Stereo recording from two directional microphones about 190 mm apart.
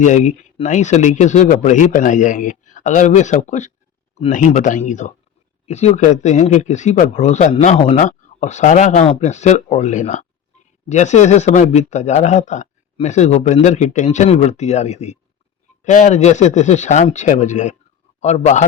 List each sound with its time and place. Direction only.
0.0 s a man's voice: 40° left (ahead or behind)